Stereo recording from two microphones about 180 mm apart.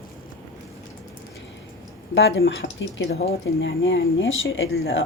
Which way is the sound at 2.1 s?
85° left.